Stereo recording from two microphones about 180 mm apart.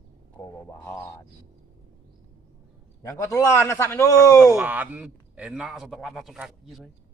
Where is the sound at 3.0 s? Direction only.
15° left (ahead or behind).